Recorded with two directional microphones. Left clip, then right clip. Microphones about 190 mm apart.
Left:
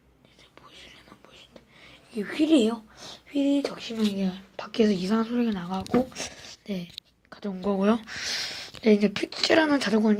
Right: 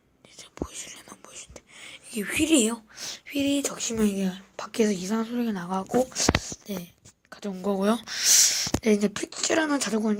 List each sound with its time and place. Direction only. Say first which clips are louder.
0.5 s whispering: right 11 dB; 45° right (ahead or behind)
1.8 s a sound: right 1 dB; 35° right (ahead or behind)
2.3 s speech: left 1 dB; 20° right (ahead or behind)
3.6 s a woman's voice: right 2 dB; 30° right (ahead or behind)
7.3 s speech: even; 10° right (ahead or behind)